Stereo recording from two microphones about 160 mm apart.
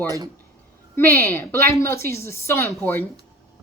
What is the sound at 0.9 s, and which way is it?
A woman's voice, 15° left (ahead or behind).